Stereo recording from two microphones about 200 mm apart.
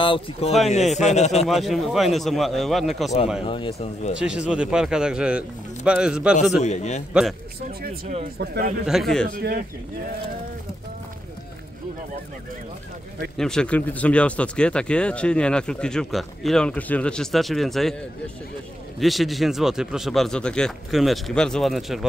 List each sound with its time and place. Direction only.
0.0 s a man's voice: 25° left (ahead or behind)
1.5 s speech: centre (ahead or behind)
3.4 s speech: 25° left (ahead or behind)
4.1 s speech: 5° right (ahead or behind)
6.6 s a man's voice: 35° left (ahead or behind)
8.4 s speech: 50° right (ahead or behind)
8.8 s speech: centre (ahead or behind)
9.3 s speech: 45° right (ahead or behind)
13.4 s speech: 5° left (ahead or behind)
18.9 s speech: centre (ahead or behind)